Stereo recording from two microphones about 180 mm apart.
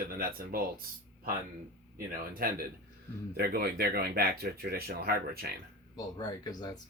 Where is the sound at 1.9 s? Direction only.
55° right (ahead or behind).